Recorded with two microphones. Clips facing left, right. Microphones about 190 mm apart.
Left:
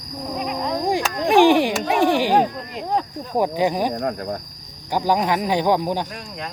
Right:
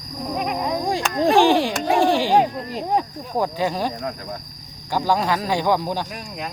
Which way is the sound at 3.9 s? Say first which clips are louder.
Left 5 dB; 50° left (ahead or behind).